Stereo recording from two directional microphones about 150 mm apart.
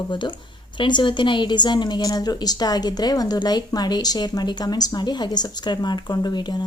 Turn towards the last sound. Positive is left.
turn(degrees=30)  # may be behind; listen again after turning